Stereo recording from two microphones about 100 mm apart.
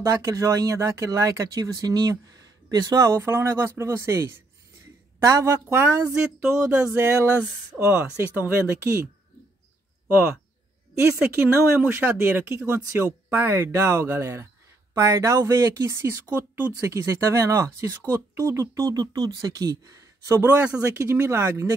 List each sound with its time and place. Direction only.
0.0 s speech: 35° right (ahead or behind)
5.7 s speech: 20° right (ahead or behind)
11.0 s speech: 15° right (ahead or behind); by 20.4 s 35° right (ahead or behind)
20.8 s speech: 20° right (ahead or behind)